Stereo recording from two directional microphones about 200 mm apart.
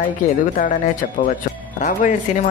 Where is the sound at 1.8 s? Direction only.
40° left (ahead or behind).